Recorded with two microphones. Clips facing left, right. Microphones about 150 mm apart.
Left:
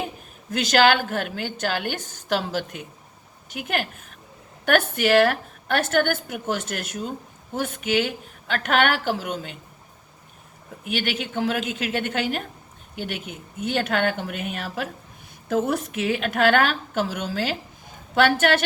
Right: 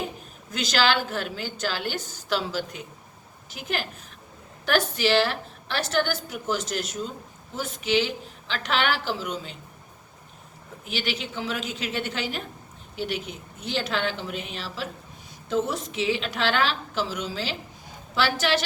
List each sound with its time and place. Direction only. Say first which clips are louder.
0.5 s a woman's voice: left 5 dB; 50° left (ahead or behind)
10.9 s a woman's voice: left 4 dB; 50° left (ahead or behind)